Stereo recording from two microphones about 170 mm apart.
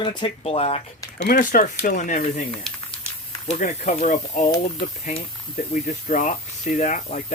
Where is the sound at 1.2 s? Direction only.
50° left (ahead or behind).